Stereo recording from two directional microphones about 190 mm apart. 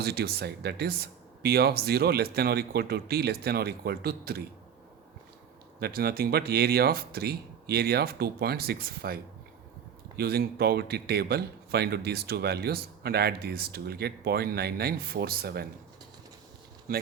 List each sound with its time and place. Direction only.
0.0 s speech: 55° right (ahead or behind)
5.8 s speech: 55° right (ahead or behind)